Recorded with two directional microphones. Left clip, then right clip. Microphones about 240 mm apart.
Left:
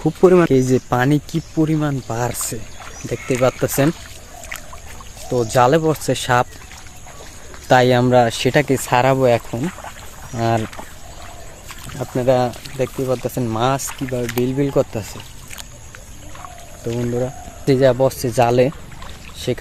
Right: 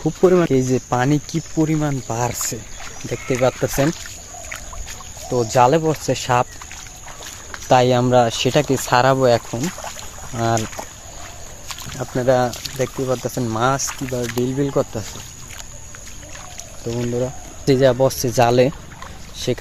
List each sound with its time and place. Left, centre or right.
0.0 s speech: centre
5.3 s speech: centre
7.7 s speech: centre
9.6 s boat: right
10.3 s speech: centre
11.9 s speech: centre
17.2 s speech: centre